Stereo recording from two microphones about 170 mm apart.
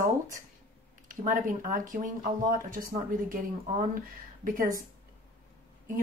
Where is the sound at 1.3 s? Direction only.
50° right (ahead or behind).